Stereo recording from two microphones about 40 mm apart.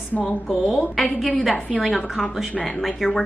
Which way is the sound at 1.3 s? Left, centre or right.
Centre.